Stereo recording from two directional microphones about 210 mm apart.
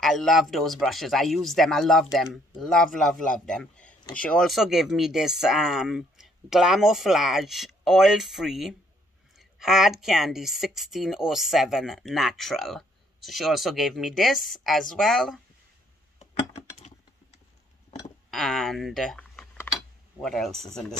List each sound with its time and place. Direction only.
0.0 s speech: centre (ahead or behind)
16.2 s a sound: 30° left (ahead or behind)
18.3 s speech: centre (ahead or behind)